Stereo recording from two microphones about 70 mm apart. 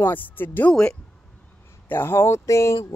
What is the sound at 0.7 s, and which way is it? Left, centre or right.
Speech, centre.